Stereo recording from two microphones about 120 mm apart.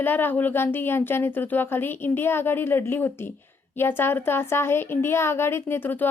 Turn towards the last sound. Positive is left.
turn(degrees=15)  # may be behind; listen again after turning